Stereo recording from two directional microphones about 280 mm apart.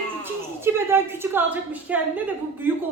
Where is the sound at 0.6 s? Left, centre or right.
Centre.